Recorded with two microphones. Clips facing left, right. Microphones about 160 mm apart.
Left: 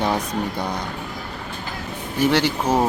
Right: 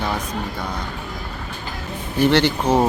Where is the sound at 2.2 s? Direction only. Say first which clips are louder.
Right 2 dB; 5° left (ahead or behind).